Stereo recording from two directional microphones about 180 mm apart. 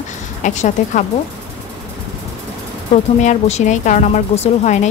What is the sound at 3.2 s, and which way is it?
Speech, 40° left (ahead or behind).